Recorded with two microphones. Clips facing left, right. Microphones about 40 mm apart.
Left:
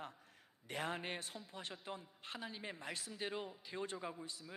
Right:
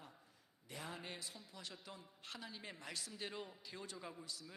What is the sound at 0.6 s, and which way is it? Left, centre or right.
A man's voice, left.